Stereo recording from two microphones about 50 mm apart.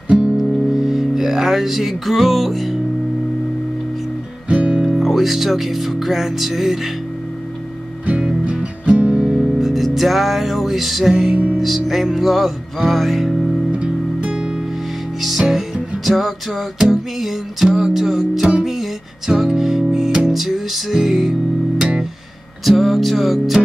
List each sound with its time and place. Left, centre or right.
0.4 s music: centre
4.5 s music: right
4.9 s speech: centre
8.1 s music: right
9.2 s music: centre
13.7 s music: right
16.1 s music: centre
22.7 s music: centre